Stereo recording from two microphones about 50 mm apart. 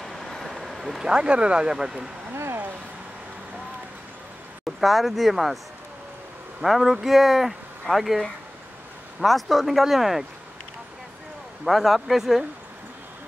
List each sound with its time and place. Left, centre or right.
0.0 s vehicle: centre
1.0 s speech: centre
4.6 s speech: centre
6.6 s speech: centre
9.2 s speech: centre
11.6 s speech: centre